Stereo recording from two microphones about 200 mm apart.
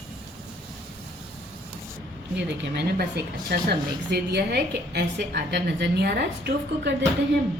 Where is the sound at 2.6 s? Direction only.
55° right (ahead or behind).